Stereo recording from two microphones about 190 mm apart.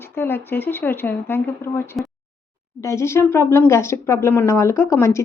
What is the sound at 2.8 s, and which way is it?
Speech, 15° left (ahead or behind).